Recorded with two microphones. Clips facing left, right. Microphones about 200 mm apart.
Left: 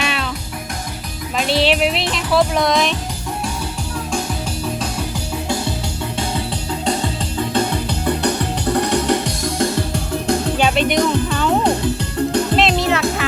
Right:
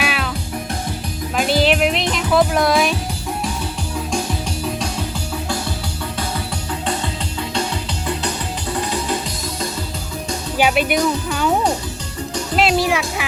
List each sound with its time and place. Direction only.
0.0 s music: 5° right (ahead or behind)
1.4 s speech: centre (ahead or behind)
7.3 s music: 55° left (ahead or behind)
10.6 s music: 10° right (ahead or behind)
12.3 s music: 55° left (ahead or behind)
12.5 s music: 5° right (ahead or behind)